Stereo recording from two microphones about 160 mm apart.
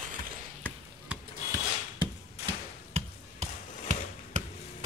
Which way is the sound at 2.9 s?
45° right (ahead or behind).